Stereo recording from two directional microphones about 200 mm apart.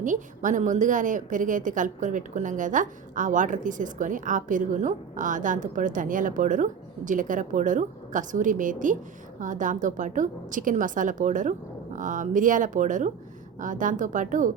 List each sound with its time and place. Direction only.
0.0 s a woman's voice: 40° right (ahead or behind)